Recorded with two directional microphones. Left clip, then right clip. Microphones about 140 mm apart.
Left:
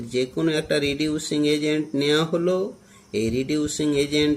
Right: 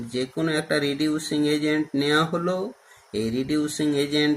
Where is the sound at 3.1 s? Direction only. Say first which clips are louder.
Left 2 dB; 45° left (ahead or behind).